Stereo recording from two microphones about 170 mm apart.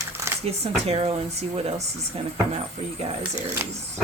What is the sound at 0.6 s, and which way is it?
Speech, 35° right (ahead or behind).